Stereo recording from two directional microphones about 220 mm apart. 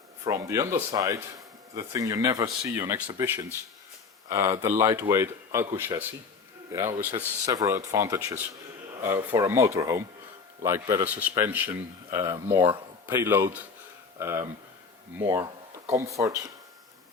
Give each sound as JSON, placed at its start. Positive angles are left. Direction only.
{"t": 0.3, "sound": "speech", "side_deg": -15}
{"t": 7.2, "sound": "speech", "side_deg": -15}